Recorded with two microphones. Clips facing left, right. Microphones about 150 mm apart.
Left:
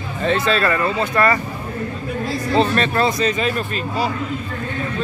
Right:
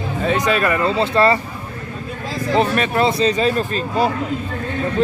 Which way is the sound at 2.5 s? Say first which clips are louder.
Right 1 dB; 10° right (ahead or behind).